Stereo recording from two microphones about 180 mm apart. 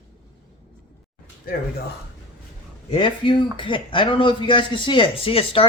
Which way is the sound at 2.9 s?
25° left (ahead or behind).